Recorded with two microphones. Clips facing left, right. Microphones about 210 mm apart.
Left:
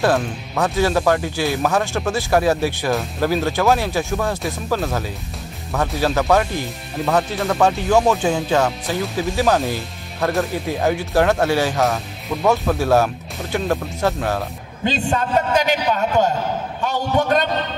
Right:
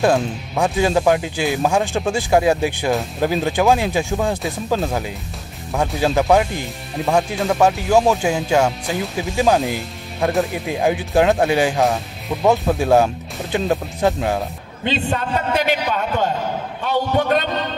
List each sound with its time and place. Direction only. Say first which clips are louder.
0.0 s speech: right 2 dB; 15° right (ahead or behind)
14.9 s a man's voice: even; 45° left (ahead or behind)